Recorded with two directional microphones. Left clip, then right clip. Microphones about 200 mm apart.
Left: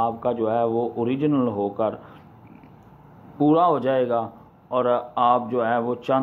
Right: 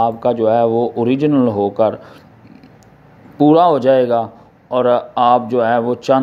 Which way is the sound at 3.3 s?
30° right (ahead or behind).